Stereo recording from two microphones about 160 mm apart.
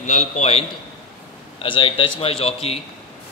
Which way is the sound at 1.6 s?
35° left (ahead or behind).